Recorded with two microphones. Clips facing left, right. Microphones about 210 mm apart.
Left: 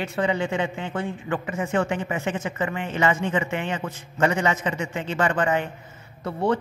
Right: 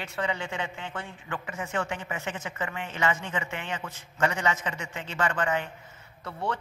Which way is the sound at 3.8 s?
35° left (ahead or behind).